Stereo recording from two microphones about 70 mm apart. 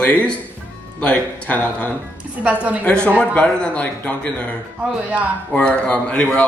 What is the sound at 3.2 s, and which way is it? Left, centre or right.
Speech, left.